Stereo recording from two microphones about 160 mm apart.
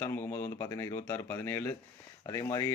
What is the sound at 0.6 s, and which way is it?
Speech, 15° left (ahead or behind).